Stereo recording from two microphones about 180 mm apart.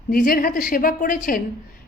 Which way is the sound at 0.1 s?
50° left (ahead or behind).